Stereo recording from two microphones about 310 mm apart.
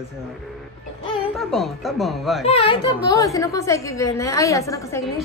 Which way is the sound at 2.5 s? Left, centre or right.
Centre.